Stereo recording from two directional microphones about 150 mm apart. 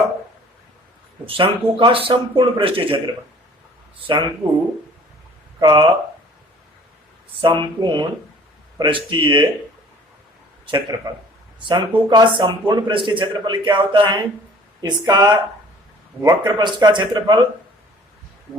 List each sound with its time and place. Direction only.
1.2 s a man's voice: 35° right (ahead or behind)
4.0 s a man's voice: 35° right (ahead or behind)
5.5 s speech: 30° right (ahead or behind)
7.4 s a man's voice: 30° right (ahead or behind)
10.7 s a man's voice: 30° right (ahead or behind)